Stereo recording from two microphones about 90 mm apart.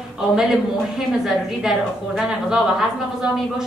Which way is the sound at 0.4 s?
5° right (ahead or behind).